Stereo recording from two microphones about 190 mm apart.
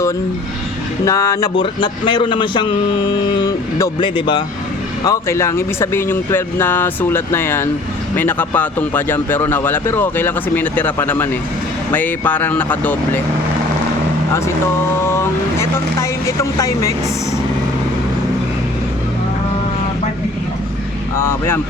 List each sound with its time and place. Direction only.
1.0 s speech: 15° left (ahead or behind)
15.1 s speech: 15° left (ahead or behind)
21.2 s speech: 10° left (ahead or behind)